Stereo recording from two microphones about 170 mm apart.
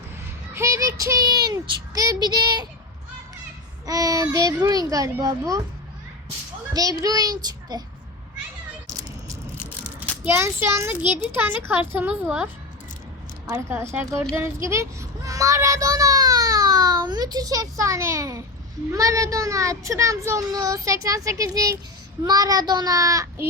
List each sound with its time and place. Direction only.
0.5 s a child's voice: 15° right (ahead or behind)
3.8 s a child's voice: 20° right (ahead or behind)
6.7 s a child's voice: 20° right (ahead or behind)
10.2 s speech: 15° right (ahead or behind)
13.5 s a child's voice: 15° right (ahead or behind)